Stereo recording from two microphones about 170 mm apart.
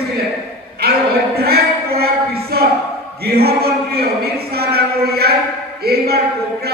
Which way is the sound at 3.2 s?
65° right (ahead or behind).